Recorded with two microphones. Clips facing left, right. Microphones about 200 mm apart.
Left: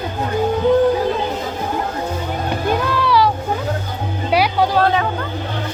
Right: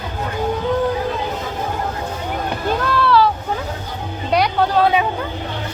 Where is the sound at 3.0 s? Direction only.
15° left (ahead or behind).